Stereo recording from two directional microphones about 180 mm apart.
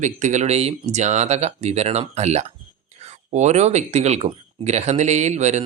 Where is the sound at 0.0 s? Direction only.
40° right (ahead or behind).